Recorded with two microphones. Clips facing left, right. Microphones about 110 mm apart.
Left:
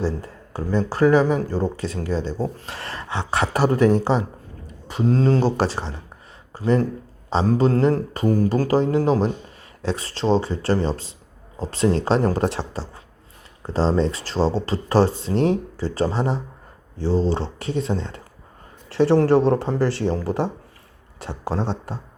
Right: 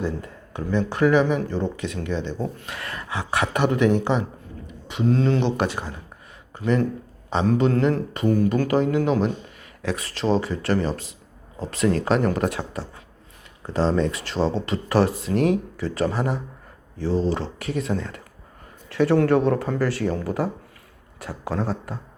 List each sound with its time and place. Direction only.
0.0 s speech: 30° left (ahead or behind)